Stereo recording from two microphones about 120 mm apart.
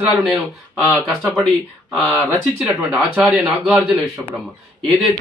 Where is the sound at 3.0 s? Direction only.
5° right (ahead or behind).